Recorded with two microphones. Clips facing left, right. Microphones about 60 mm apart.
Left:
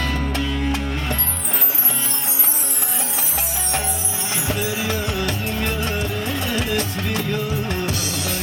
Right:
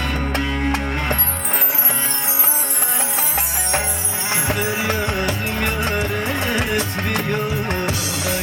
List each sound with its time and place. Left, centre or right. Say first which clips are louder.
0.0 s music: right 1 dB; right
4.4 s music: right 2 dB; right